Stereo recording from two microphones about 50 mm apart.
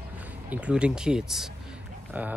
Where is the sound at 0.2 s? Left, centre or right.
Right.